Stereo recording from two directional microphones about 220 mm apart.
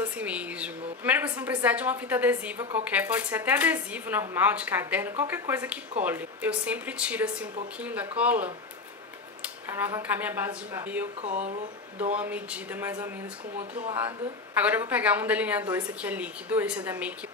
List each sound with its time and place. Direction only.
0.0 s a woman's voice: 5° right (ahead or behind)
9.7 s a woman's voice: 10° right (ahead or behind)
11.2 s speech: 30° right (ahead or behind)
12.0 s a woman's voice: 5° right (ahead or behind)